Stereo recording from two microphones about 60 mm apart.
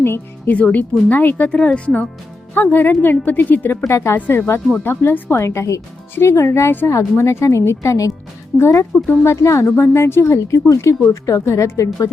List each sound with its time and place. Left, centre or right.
0.0 s music: left
0.5 s a woman's voice: left
2.6 s speech: left
3.8 s a woman's voice: left
8.5 s speech: left
9.2 s a woman's voice: left
9.8 s a woman's voice: left